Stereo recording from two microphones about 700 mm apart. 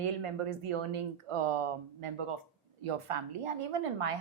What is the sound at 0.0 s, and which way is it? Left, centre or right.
Speech, right.